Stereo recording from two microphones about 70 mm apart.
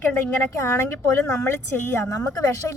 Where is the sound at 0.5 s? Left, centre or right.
Left.